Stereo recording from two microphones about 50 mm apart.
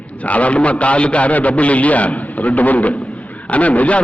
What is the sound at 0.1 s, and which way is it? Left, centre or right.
A man's voice, left.